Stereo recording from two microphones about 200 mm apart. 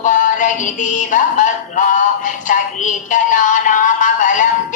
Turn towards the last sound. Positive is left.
turn(degrees=40)  # may be behind; listen again after turning